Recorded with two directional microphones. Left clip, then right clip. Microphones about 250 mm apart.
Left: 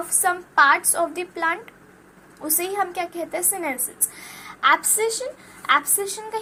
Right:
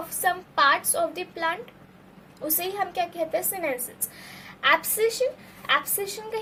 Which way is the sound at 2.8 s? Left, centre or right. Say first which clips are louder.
Right 1 dB; left.